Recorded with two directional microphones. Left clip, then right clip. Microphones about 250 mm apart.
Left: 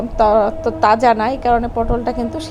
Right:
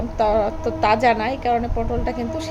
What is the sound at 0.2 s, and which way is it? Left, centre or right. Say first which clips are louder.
A woman's voice: left 6 dB; centre.